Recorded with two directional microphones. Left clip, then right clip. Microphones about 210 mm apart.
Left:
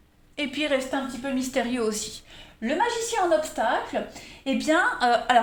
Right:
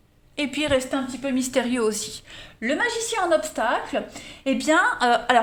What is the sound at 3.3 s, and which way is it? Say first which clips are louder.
A woman's voice: right 4 dB; 35° right (ahead or behind).